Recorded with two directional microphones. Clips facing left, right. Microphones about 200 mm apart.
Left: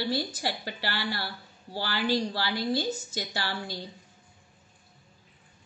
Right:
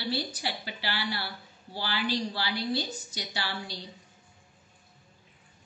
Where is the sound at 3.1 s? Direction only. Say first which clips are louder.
Left 3 dB; 45° left (ahead or behind).